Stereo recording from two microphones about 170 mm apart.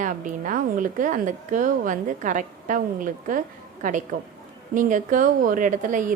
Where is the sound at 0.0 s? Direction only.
50° right (ahead or behind).